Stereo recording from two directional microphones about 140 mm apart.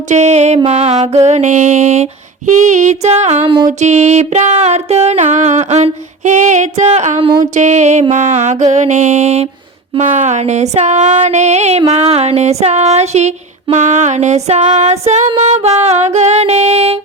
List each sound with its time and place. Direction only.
0.1 s a sound: 55° right (ahead or behind)
2.5 s music: 60° right (ahead or behind)
3.4 s music: 40° right (ahead or behind)
3.7 s music: 55° right (ahead or behind)
7.2 s music: 40° right (ahead or behind)
7.5 s music: 60° right (ahead or behind)
11.9 s a sound: 50° right (ahead or behind)